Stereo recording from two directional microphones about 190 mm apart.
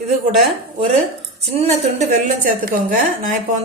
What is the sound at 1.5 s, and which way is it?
A woman's voice, 40° right (ahead or behind).